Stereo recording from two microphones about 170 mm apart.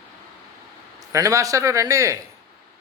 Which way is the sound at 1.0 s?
20° right (ahead or behind).